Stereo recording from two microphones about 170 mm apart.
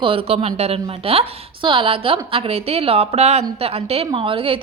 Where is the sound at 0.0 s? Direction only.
35° right (ahead or behind).